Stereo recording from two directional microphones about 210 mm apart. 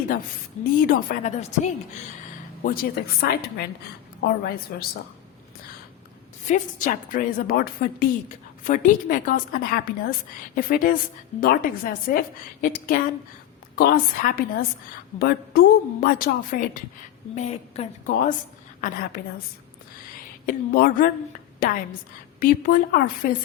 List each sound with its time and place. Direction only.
0.6 s a woman's voice: 45° left (ahead or behind)
2.6 s a woman's voice: 45° left (ahead or behind)
6.5 s a woman's voice: 40° left (ahead or behind)
13.7 s a woman's voice: 40° left (ahead or behind)
17.3 s a woman's voice: 30° left (ahead or behind)
20.5 s a woman's voice: 45° left (ahead or behind)
22.4 s a woman's voice: 40° left (ahead or behind)